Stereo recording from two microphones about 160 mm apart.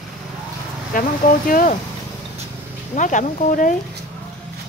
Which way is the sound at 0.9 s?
60° left (ahead or behind).